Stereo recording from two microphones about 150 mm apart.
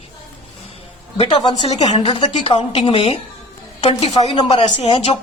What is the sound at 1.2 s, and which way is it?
Speech, 30° left (ahead or behind).